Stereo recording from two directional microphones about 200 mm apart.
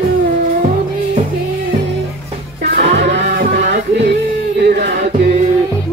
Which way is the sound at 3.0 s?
60° right (ahead or behind).